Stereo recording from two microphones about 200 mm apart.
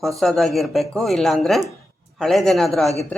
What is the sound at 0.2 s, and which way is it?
Speech, centre (ahead or behind).